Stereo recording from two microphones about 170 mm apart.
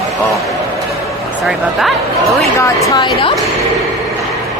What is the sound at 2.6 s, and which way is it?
Speech, 20° left (ahead or behind).